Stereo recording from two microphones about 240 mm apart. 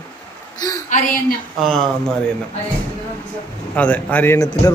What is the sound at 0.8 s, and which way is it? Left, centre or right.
Speech, left.